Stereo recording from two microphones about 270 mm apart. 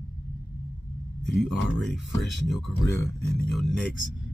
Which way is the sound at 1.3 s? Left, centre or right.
Centre.